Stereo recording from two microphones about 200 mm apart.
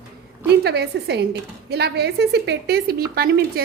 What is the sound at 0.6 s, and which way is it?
A woman's voice, 55° right (ahead or behind).